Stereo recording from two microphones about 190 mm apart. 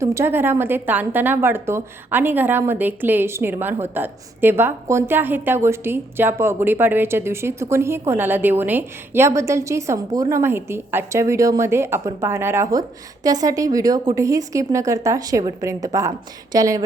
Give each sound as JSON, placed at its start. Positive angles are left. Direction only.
{"t": 0.0, "sound": "a woman's voice", "side_deg": -15}